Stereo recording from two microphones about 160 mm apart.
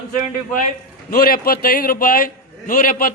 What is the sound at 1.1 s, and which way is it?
A man's voice, 70° left (ahead or behind).